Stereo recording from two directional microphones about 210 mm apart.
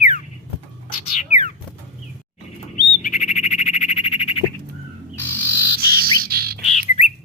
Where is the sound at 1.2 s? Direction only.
35° left (ahead or behind).